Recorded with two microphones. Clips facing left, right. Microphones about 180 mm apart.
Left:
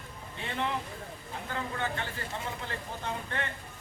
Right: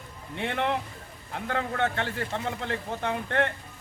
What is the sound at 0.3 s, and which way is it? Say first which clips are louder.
A man's voice: right 6 dB; 65° right (ahead or behind).